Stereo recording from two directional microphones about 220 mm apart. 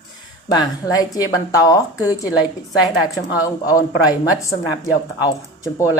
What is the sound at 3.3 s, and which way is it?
Speech, 15° left (ahead or behind).